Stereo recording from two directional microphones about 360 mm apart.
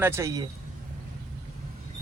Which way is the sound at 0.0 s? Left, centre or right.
Centre.